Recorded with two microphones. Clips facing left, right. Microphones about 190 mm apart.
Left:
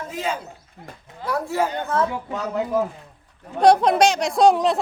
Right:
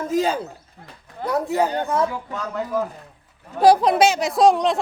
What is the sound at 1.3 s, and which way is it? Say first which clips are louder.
Speech: right 2 dB; 20° right (ahead or behind).